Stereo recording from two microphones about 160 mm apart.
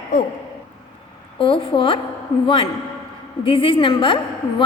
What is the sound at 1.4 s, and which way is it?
Speech, 35° left (ahead or behind).